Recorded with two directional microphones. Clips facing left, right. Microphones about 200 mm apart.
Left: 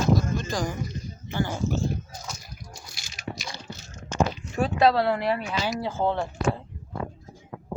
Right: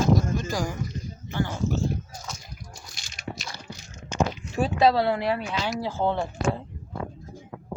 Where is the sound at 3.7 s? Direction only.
15° right (ahead or behind).